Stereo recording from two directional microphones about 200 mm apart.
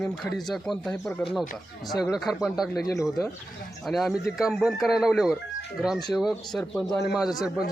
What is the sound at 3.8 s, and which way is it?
Speech, centre (ahead or behind).